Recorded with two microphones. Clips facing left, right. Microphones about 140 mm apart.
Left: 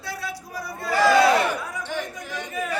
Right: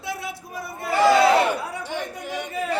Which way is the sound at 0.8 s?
25° right (ahead or behind).